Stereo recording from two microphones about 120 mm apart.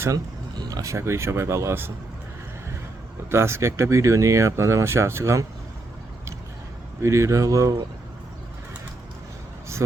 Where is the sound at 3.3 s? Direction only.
20° right (ahead or behind).